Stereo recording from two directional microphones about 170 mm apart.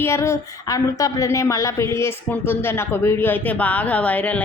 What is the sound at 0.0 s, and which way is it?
A woman's voice, 15° left (ahead or behind).